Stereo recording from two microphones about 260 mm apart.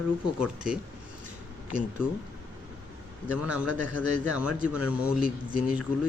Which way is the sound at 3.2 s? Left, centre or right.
Centre.